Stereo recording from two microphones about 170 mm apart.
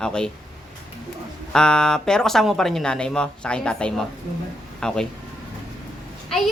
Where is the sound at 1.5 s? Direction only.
5° left (ahead or behind).